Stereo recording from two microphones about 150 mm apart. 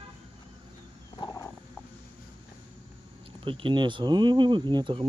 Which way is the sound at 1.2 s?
20° left (ahead or behind).